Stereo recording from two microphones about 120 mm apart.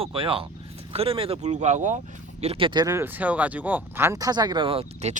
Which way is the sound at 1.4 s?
75° right (ahead or behind).